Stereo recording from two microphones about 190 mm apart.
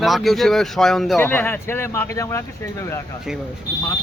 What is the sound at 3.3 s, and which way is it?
Speech, centre (ahead or behind).